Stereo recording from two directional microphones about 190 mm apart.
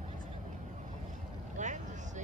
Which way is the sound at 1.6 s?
40° right (ahead or behind).